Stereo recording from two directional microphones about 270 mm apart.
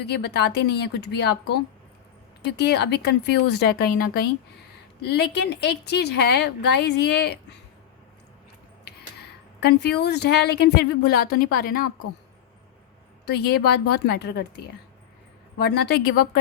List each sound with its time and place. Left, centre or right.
0.0 s speech: left
8.8 s speech: left
13.2 s speech: left
15.5 s speech: left